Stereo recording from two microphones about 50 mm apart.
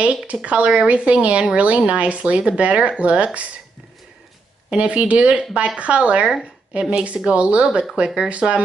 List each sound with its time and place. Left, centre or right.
0.3 s speech: right
4.6 s speech: right